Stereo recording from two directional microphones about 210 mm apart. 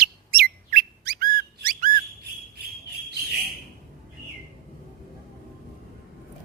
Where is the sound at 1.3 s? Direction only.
40° right (ahead or behind).